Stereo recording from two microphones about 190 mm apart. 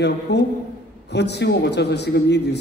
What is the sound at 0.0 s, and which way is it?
A man's voice, 65° left (ahead or behind).